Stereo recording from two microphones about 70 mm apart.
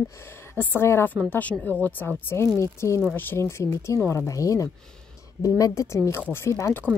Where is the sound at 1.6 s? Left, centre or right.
Left.